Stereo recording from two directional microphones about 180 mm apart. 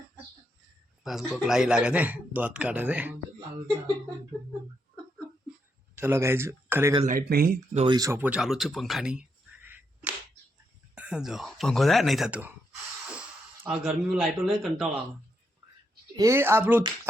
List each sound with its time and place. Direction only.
1.0 s a man's voice: centre (ahead or behind)
6.0 s a man's voice: 15° right (ahead or behind)
7.0 s speech: 50° right (ahead or behind)
7.7 s speech: 35° right (ahead or behind)
7.9 s speech: 15° right (ahead or behind)
10.9 s speech: 5° right (ahead or behind)
16.1 s a man's voice: 15° right (ahead or behind)